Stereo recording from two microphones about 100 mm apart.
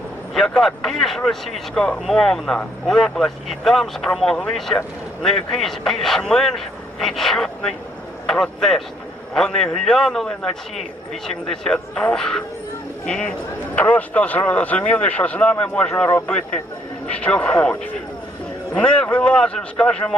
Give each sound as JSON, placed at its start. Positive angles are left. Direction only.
{"t": 0.3, "sound": "a man's voice", "side_deg": 5}